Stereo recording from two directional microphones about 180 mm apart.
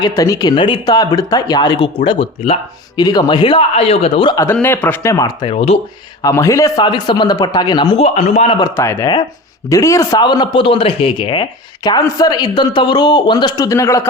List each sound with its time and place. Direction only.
0.0 s a man's voice: 20° left (ahead or behind)
3.0 s a man's voice: 25° left (ahead or behind)
4.4 s a man's voice: 10° left (ahead or behind); by 5.8 s 35° left (ahead or behind)
6.2 s a man's voice: 15° left (ahead or behind); by 8.5 s 35° left (ahead or behind)
8.6 s a man's voice: 15° left (ahead or behind)